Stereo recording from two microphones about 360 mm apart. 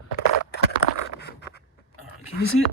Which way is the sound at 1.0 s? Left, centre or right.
Left.